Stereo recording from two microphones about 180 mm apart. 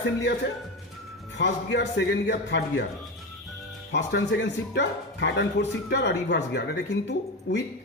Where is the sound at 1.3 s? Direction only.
80° left.